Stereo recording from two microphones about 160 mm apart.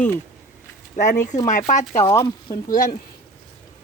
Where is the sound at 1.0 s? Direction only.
50° left (ahead or behind).